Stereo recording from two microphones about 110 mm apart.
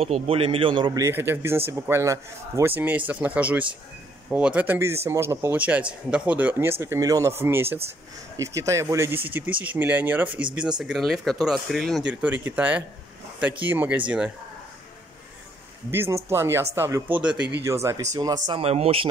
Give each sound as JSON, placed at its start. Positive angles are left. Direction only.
{"t": 0.0, "sound": "a man's voice", "side_deg": -60}
{"t": 1.1, "sound": "speech", "side_deg": -20}
{"t": 5.6, "sound": "speech", "side_deg": -15}
{"t": 12.0, "sound": "speech", "side_deg": -10}
{"t": 15.9, "sound": "speech", "side_deg": -20}
{"t": 17.2, "sound": "speech", "side_deg": -10}
{"t": 17.6, "sound": "speech", "side_deg": -25}
{"t": 18.1, "sound": "speech", "side_deg": -40}
{"t": 18.6, "sound": "a man's voice", "side_deg": -65}